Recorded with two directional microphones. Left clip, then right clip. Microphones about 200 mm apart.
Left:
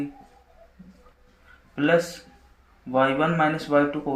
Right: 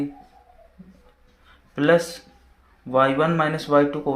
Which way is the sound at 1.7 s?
40° right (ahead or behind).